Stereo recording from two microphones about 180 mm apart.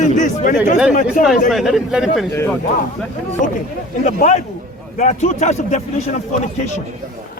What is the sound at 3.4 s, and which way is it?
A man's voice, 45° left (ahead or behind).